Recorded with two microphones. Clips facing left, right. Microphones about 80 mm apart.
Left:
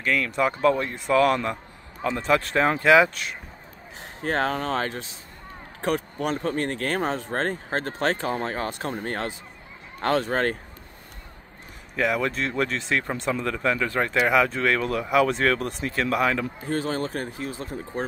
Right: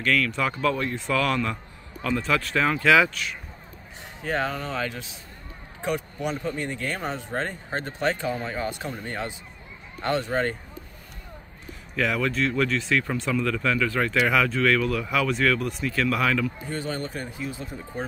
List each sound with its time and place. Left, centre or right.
0.0 s speech: centre
4.2 s speech: left
5.9 s speech: left
11.9 s speech: left
16.6 s speech: left